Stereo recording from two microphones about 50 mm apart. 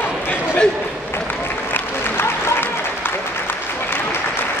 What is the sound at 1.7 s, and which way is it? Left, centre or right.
Applause, left.